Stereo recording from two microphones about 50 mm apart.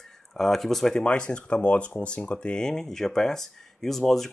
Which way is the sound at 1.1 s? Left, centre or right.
Left.